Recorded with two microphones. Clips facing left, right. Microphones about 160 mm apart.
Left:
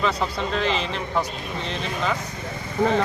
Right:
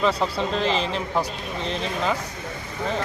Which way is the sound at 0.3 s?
35° right (ahead or behind).